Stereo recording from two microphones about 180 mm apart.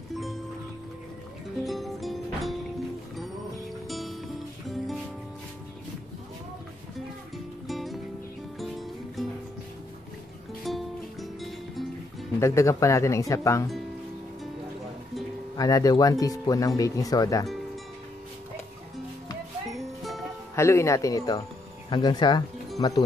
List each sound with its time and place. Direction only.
0.1 s music: centre (ahead or behind)
1.6 s music: centre (ahead or behind)
3.8 s music: centre (ahead or behind)
7.6 s music: centre (ahead or behind)
10.6 s music: centre (ahead or behind)
12.4 s speech: 15° left (ahead or behind)
15.5 s speech: 20° left (ahead or behind)
20.0 s music: centre (ahead or behind)
20.5 s speech: 15° left (ahead or behind)